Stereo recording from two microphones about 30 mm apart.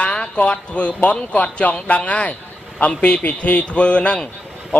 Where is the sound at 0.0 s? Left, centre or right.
Left.